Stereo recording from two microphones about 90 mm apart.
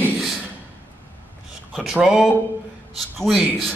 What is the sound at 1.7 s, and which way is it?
Speech, centre (ahead or behind).